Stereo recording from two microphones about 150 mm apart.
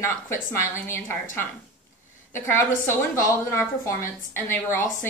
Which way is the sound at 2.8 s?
20° left (ahead or behind).